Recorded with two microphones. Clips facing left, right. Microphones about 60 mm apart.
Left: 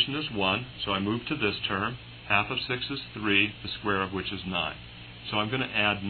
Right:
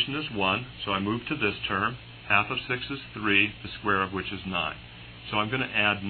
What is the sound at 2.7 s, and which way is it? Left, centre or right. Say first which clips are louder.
Speech: right 2 dB; centre.